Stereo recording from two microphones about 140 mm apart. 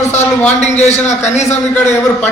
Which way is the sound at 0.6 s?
55° left (ahead or behind).